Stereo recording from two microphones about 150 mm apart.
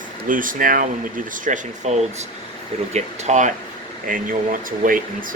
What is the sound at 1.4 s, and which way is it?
Speech, 55° right (ahead or behind).